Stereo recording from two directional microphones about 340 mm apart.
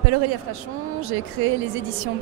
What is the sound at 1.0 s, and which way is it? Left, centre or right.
Speech, right.